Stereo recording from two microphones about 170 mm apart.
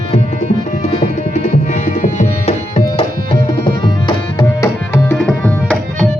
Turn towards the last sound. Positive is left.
turn(degrees=5)  # may be behind; listen again after turning